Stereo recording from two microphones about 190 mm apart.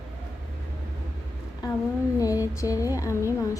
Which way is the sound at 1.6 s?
20° left (ahead or behind).